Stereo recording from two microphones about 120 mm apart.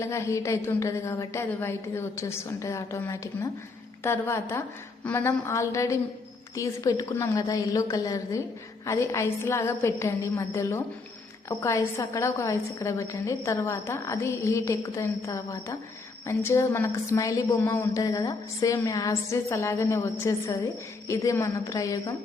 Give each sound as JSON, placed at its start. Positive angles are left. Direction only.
{"t": 0.0, "sound": "a woman's voice", "side_deg": 25}